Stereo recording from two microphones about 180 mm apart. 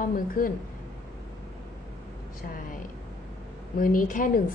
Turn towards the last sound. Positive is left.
turn(degrees=50)  # may be behind; listen again after turning